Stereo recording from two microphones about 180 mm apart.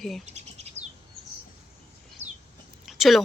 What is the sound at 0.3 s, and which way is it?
Bird, 40° right (ahead or behind).